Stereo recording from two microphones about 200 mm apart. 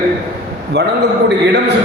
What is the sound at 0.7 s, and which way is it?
Speech, 55° right (ahead or behind).